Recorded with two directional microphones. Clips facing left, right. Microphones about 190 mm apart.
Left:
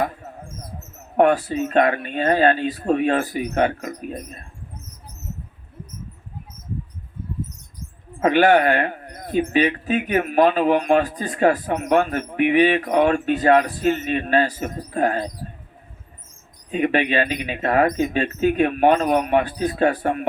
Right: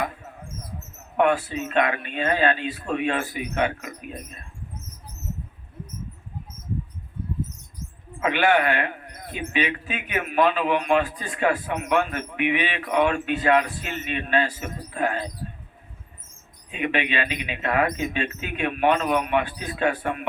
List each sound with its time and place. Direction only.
1.1 s speech: 40° left (ahead or behind)
8.2 s speech: 40° left (ahead or behind)
16.7 s speech: 40° left (ahead or behind)